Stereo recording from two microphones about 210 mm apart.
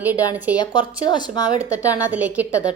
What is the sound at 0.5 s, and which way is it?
Speech, 20° left (ahead or behind).